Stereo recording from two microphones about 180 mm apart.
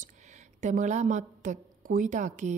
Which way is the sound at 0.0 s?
40° right (ahead or behind).